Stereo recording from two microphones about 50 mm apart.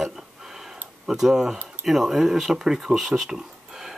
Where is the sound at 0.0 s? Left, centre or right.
Centre.